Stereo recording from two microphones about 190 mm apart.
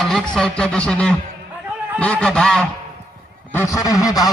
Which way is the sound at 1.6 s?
5° right (ahead or behind).